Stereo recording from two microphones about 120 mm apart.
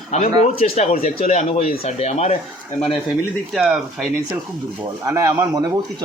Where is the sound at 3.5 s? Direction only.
Centre (ahead or behind).